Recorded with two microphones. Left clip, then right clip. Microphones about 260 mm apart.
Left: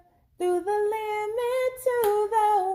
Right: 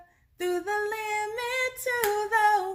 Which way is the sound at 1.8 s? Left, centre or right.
Right.